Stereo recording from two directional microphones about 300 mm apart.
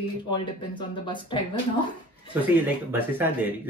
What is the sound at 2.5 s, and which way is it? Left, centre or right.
Speech, centre.